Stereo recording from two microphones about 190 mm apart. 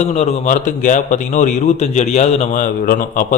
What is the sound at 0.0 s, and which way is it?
A man's voice, 35° left (ahead or behind).